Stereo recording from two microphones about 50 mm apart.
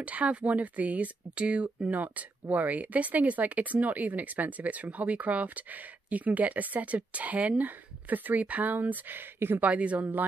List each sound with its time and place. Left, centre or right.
0.0 s speech: right
9.6 s speech: right